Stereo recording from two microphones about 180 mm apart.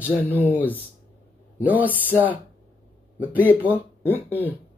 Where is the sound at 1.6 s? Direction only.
10° right (ahead or behind).